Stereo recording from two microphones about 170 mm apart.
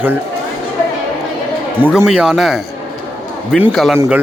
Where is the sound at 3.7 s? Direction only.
Centre (ahead or behind).